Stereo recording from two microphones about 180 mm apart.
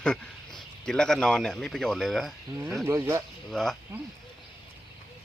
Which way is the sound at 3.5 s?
Centre (ahead or behind).